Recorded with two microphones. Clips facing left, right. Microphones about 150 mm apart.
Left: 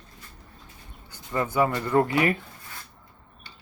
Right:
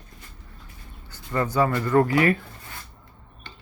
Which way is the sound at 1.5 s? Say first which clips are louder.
Right 2 dB; 20° left (ahead or behind).